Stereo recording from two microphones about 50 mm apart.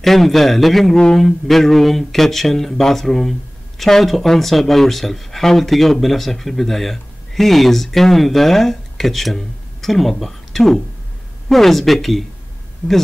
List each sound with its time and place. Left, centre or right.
0.0 s speech: centre
12.8 s speech: left